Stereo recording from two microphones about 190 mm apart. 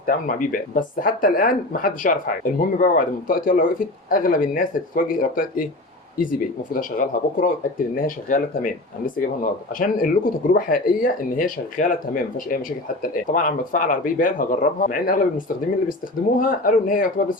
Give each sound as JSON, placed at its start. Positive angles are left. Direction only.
{"t": 0.0, "sound": "speech", "side_deg": 45}
{"t": 16.4, "sound": "speech", "side_deg": 45}